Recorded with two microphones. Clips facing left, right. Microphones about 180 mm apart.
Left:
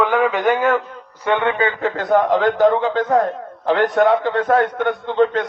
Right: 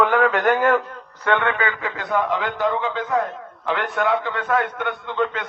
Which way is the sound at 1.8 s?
45° left (ahead or behind).